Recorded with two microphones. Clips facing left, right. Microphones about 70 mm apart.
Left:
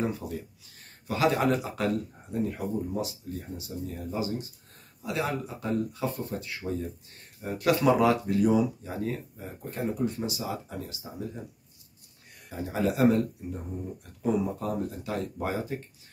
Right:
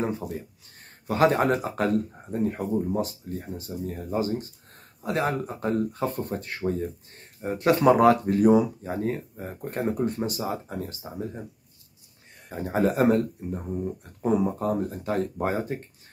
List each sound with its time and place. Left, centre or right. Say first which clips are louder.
0.2 s speech: right 2 dB; right
12.4 s speech: right 4 dB; right